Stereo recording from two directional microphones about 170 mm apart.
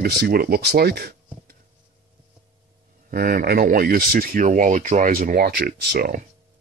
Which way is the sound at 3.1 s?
55° right (ahead or behind).